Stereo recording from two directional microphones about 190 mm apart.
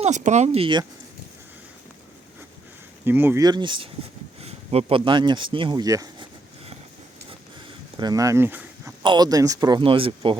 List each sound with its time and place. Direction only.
0.0 s speech: 40° right (ahead or behind)
3.0 s speech: 10° right (ahead or behind)
7.9 s speech: 20° right (ahead or behind)